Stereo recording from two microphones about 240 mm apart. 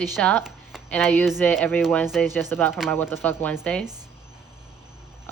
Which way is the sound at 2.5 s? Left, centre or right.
Centre.